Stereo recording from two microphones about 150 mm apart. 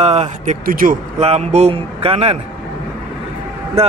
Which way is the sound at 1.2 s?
45° right (ahead or behind).